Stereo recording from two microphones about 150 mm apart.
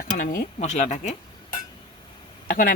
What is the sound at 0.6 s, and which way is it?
Speech, 50° left (ahead or behind).